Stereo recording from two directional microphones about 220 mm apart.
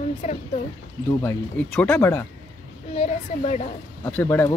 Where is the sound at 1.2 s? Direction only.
5° left (ahead or behind).